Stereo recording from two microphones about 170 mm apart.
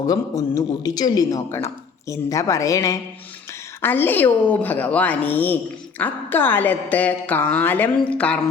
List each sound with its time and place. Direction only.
0.1 s a man's voice: 20° left (ahead or behind)